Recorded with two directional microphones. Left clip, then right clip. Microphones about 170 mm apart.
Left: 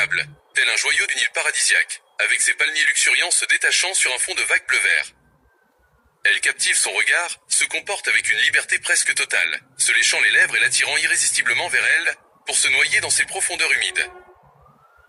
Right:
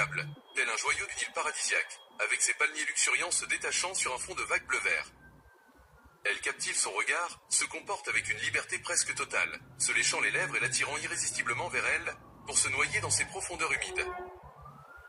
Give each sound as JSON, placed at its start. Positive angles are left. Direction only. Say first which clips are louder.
{"t": 0.2, "sound": "speech", "louder": "left 13 dB", "side_deg": 90}
{"t": 6.2, "sound": "speech", "louder": "left 15 dB", "side_deg": 90}